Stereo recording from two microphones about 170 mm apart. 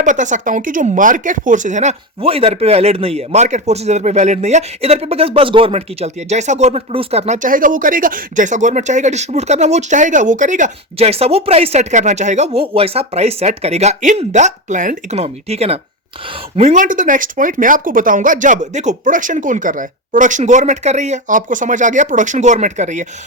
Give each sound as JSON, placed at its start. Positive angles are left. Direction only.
{"t": 0.0, "sound": "speech", "side_deg": -45}